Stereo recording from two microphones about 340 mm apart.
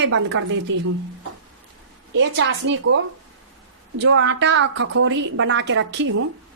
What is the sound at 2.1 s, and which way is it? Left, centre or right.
Speech, right.